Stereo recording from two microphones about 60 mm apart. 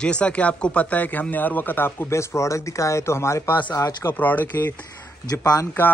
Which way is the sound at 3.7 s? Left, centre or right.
Left.